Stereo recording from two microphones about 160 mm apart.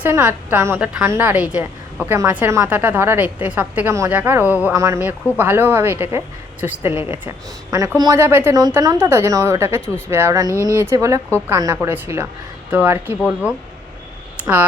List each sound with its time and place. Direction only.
0.0 s a woman's voice: 15° right (ahead or behind)
6.9 s a woman's voice: 40° left (ahead or behind)
7.3 s a woman's voice: 20° right (ahead or behind); by 13.5 s 5° right (ahead or behind)
14.3 s a sound: 10° right (ahead or behind)